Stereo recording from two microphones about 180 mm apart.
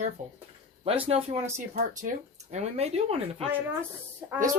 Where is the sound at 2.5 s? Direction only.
35° right (ahead or behind).